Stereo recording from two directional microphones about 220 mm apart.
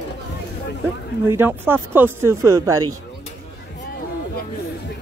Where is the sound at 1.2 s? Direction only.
10° right (ahead or behind).